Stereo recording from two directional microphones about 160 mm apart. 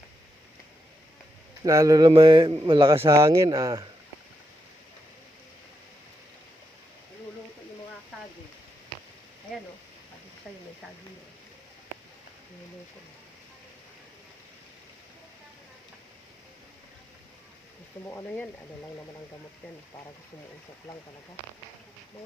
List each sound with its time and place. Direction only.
1.6 s a man's voice: 20° right (ahead or behind)
2.9 s speech: 15° right (ahead or behind)
18.0 s a sound: 15° left (ahead or behind)